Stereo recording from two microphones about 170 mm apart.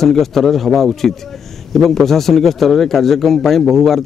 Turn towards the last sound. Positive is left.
turn(degrees=0)  # may be behind; listen again after turning